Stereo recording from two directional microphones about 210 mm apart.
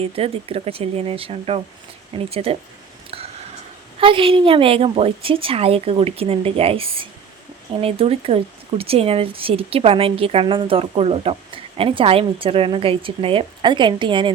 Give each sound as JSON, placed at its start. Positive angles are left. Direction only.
{"t": 0.0, "sound": "a woman's voice", "side_deg": -25}
{"t": 4.0, "sound": "a woman's voice", "side_deg": -25}